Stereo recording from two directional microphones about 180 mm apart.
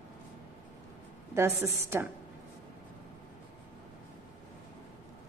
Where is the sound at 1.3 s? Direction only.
15° right (ahead or behind).